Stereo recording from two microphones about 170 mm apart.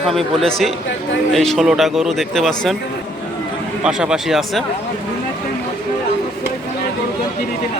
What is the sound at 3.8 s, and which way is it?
Speech, 5° right (ahead or behind).